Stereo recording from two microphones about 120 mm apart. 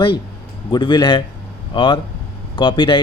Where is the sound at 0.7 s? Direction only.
35° left (ahead or behind).